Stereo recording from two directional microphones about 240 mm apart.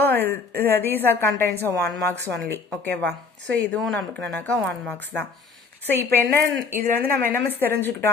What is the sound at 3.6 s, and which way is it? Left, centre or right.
A woman's voice, centre.